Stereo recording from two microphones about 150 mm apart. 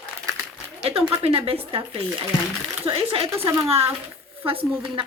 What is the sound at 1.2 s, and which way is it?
Speech, 40° right (ahead or behind).